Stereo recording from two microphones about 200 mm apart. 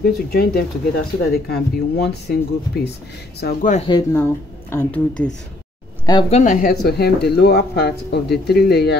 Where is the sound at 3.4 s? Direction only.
40° left (ahead or behind).